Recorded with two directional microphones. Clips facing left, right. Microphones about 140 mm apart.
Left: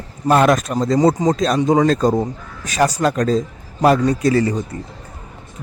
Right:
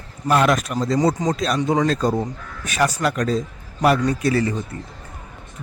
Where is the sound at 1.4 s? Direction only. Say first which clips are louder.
Left 5 dB; 40° left (ahead or behind).